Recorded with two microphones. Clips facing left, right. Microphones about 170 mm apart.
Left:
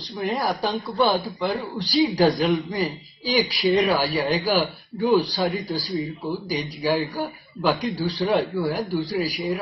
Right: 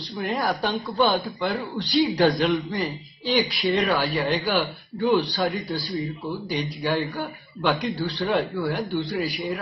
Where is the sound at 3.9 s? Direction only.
35° left (ahead or behind).